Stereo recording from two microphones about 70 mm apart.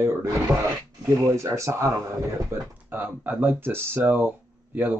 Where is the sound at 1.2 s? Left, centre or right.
Right.